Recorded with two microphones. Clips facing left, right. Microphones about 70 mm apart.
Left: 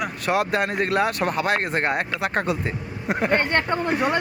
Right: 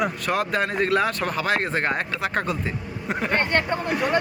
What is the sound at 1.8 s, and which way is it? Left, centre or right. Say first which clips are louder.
Speech: left 1 dB; left.